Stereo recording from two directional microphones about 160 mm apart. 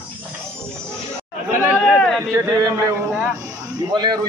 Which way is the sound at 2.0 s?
5° left (ahead or behind).